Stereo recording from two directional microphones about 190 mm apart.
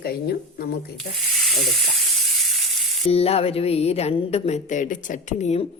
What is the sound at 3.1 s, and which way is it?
A woman's voice, 30° left (ahead or behind).